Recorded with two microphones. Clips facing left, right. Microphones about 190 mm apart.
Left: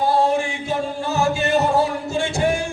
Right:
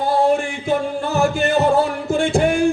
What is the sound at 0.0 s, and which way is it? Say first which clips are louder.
Music: right 2 dB; 55° right (ahead or behind).